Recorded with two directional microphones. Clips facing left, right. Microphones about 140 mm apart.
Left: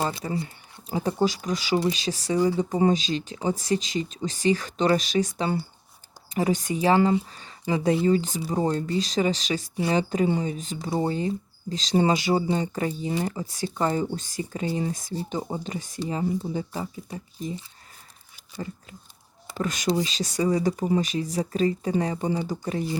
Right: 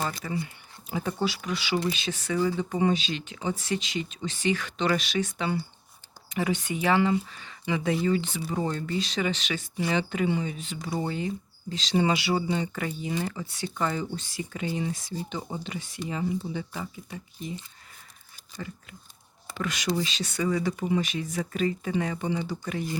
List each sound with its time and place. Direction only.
0.0 s speech: 25° left (ahead or behind)
2.3 s speech: 25° left (ahead or behind)
2.6 s speech: 35° left (ahead or behind)
18.5 s speech: 30° left (ahead or behind)
19.5 s speech: 40° left (ahead or behind)